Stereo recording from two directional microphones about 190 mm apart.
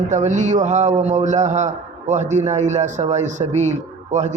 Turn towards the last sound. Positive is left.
turn(degrees=-40)  # may be behind; listen again after turning